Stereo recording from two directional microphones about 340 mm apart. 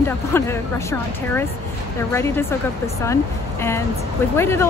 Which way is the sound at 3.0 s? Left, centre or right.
Centre.